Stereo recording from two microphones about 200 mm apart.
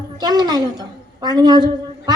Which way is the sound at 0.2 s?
20° right (ahead or behind).